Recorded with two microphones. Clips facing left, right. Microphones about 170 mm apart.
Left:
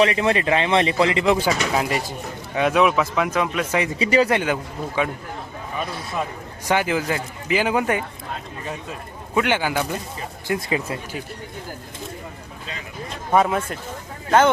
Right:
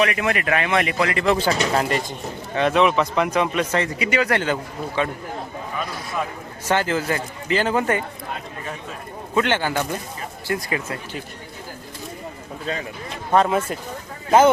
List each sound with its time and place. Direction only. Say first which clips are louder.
0.0 s speech: left 3 dB; 25° left (ahead or behind)
1.7 s speech: right 1 dB; 5° left (ahead or behind)
3.8 s speech: left 4 dB; 30° left (ahead or behind)
4.3 s speech: left 1 dB; 15° left (ahead or behind)
6.7 s speech: even; 15° left (ahead or behind)
9.3 s speech: even; 10° left (ahead or behind)
13.3 s speech: even; 5° left (ahead or behind)
14.3 s speech: right 2 dB; 10° right (ahead or behind)